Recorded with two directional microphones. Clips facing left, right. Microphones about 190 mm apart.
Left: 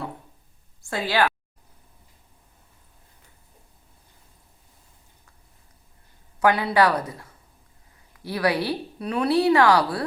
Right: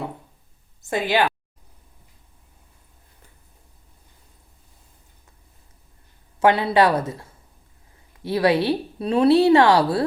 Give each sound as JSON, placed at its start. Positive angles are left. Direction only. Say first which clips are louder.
{"t": 0.8, "sound": "speech", "louder": "right 2 dB", "side_deg": -20}
{"t": 6.4, "sound": "speech", "louder": "right 3 dB", "side_deg": -25}